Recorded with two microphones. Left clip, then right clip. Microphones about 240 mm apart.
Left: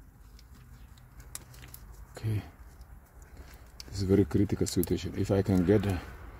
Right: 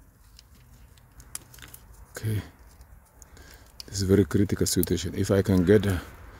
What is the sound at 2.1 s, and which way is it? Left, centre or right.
Speech, right.